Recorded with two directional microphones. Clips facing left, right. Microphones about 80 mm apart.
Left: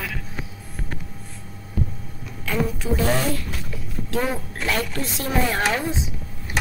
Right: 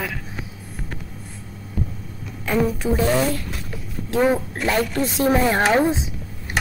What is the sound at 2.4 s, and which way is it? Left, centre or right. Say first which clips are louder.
Speech: right 4 dB; right.